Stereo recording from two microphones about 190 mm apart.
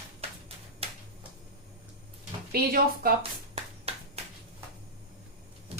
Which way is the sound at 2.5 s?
50° right (ahead or behind).